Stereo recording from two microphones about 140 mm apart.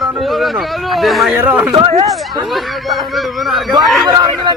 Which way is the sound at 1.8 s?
35° right (ahead or behind).